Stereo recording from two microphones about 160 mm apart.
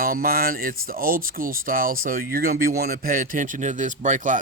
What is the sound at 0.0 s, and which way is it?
Speech, 65° right (ahead or behind).